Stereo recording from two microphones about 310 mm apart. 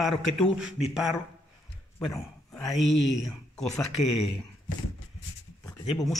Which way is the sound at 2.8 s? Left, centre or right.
Left.